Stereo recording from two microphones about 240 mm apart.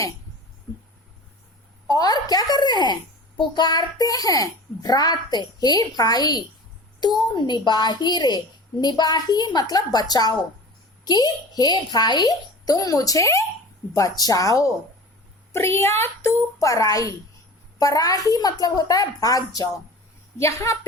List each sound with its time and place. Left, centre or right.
1.9 s a child's voice: centre